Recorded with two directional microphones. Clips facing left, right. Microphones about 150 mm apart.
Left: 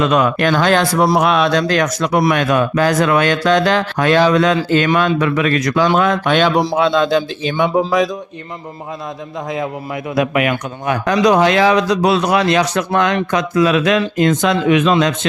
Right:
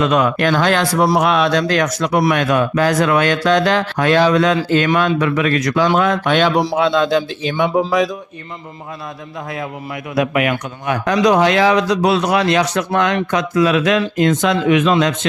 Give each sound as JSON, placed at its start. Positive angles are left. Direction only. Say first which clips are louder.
{"t": 0.0, "sound": "speech", "louder": "left 1 dB", "side_deg": 35}
{"t": 9.6, "sound": "speech", "louder": "left 4 dB", "side_deg": 30}